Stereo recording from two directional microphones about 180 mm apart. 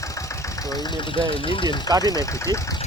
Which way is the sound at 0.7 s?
25° left (ahead or behind).